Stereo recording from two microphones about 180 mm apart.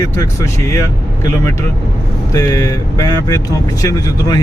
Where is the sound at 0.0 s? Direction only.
15° left (ahead or behind).